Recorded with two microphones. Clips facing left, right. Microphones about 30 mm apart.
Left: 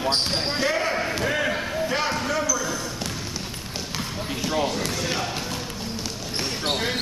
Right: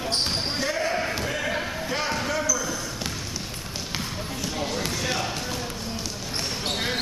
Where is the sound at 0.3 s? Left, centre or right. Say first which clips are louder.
Left 3 dB; centre.